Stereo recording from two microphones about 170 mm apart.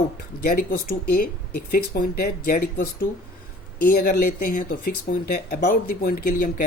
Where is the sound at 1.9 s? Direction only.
60° left (ahead or behind).